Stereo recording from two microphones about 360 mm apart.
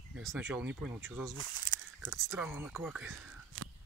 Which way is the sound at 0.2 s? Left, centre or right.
Centre.